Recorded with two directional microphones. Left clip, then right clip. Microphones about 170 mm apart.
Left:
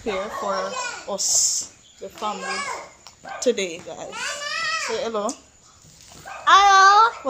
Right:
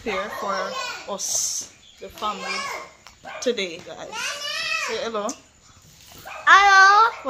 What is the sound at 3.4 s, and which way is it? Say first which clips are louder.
A woman's voice: left 2 dB; 15° left (ahead or behind).